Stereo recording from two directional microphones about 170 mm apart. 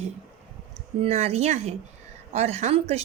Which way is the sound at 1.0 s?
35° right (ahead or behind).